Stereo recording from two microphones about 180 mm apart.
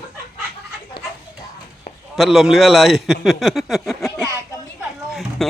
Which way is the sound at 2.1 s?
Centre (ahead or behind).